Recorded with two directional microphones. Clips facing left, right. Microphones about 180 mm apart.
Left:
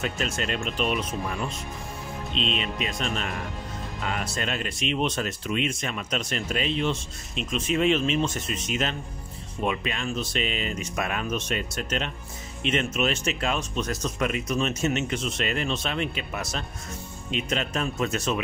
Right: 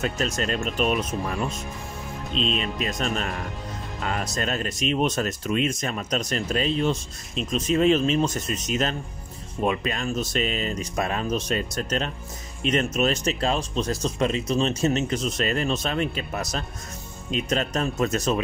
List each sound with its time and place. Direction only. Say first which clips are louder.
0.0 s speech: right 3 dB; 40° right (ahead or behind)
2.3 s speech: right 3 dB; 40° right (ahead or behind)